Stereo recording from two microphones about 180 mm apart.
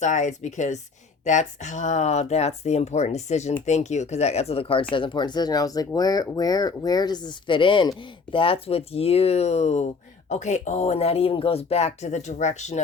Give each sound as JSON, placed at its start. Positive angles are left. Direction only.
{"t": 0.0, "sound": "speech", "side_deg": 40}